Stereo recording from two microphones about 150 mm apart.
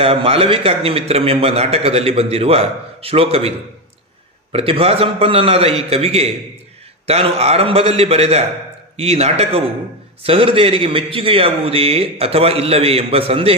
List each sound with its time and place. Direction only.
0.0 s a man's voice: 40° right (ahead or behind)
4.5 s a man's voice: 40° right (ahead or behind)